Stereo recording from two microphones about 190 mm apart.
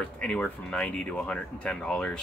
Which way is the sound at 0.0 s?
5° left (ahead or behind).